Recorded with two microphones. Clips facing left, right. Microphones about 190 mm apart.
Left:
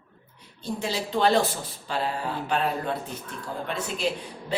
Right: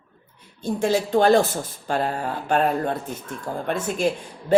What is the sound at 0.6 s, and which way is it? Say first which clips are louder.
Speech: right 8 dB; 50° right (ahead or behind).